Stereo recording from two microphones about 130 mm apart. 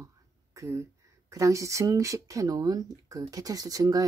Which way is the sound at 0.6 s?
25° right (ahead or behind).